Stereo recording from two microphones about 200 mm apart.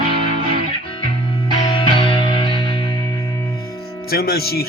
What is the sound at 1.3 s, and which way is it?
Music, 25° left (ahead or behind).